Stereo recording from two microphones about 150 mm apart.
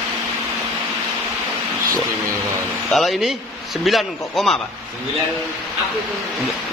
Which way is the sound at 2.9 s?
Centre (ahead or behind).